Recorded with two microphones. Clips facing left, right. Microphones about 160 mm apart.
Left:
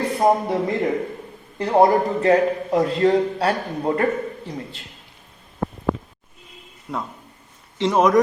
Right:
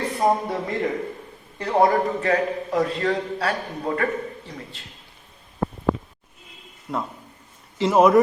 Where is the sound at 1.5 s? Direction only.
30° left (ahead or behind).